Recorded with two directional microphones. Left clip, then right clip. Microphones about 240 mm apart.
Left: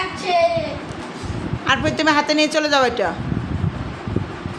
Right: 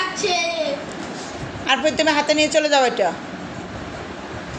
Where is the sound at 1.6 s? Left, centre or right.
Centre.